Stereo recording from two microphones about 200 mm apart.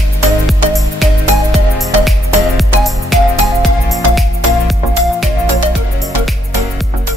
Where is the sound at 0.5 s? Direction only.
Centre (ahead or behind).